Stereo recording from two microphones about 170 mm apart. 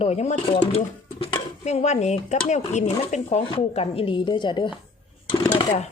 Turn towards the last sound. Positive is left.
turn(degrees=25)  # may be behind; listen again after turning